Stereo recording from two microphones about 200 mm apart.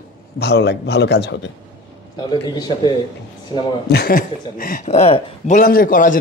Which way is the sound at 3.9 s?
50° left (ahead or behind).